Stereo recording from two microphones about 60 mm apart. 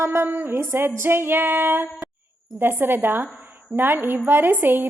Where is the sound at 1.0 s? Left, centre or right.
Right.